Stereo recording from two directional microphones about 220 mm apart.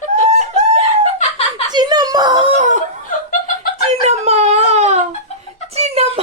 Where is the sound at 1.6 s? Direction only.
20° right (ahead or behind); by 2.8 s 35° right (ahead or behind).